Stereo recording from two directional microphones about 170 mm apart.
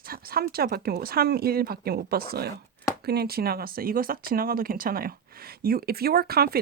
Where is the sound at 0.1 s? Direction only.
60° right (ahead or behind).